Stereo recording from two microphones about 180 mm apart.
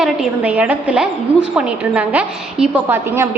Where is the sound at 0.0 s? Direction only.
5° right (ahead or behind).